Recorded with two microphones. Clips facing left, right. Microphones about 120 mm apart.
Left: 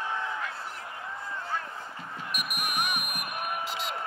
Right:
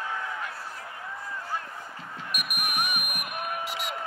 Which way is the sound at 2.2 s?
10° right (ahead or behind).